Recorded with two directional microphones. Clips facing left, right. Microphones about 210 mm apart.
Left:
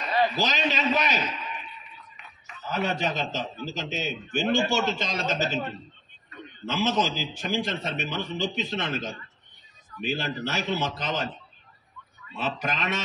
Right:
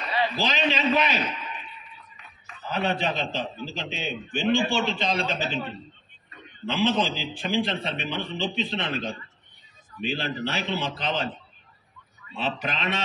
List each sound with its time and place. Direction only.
0.1 s a man's voice: 45° left (ahead or behind)
2.7 s a man's voice: 45° left (ahead or behind)
6.6 s a man's voice: 45° left (ahead or behind)
12.4 s a man's voice: 45° left (ahead or behind)